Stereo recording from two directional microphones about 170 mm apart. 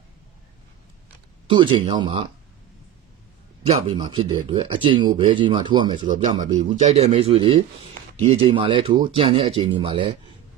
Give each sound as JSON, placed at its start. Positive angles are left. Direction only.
{"t": 1.5, "sound": "speech", "side_deg": -30}
{"t": 3.9, "sound": "speech", "side_deg": -30}
{"t": 6.2, "sound": "a man's voice", "side_deg": -45}